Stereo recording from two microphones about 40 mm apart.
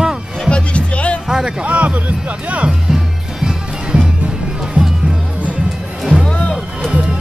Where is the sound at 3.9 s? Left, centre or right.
Right.